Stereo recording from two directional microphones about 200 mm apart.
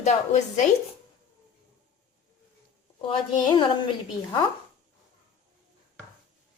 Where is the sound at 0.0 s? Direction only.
35° left (ahead or behind).